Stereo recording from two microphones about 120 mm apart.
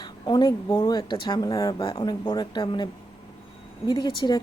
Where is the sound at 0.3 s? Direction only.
35° left (ahead or behind).